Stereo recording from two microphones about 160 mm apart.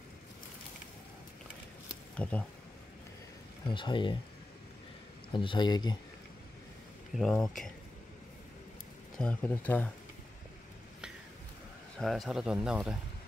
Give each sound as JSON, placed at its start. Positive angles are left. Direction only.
{"t": 2.2, "sound": "speech", "side_deg": 5}
{"t": 3.6, "sound": "speech", "side_deg": 30}
{"t": 5.3, "sound": "speech", "side_deg": 30}
{"t": 7.2, "sound": "speech", "side_deg": 0}
{"t": 9.2, "sound": "speech", "side_deg": 10}
{"t": 12.0, "sound": "speech", "side_deg": 0}